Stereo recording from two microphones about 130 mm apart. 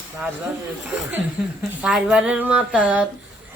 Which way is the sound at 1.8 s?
5° right (ahead or behind).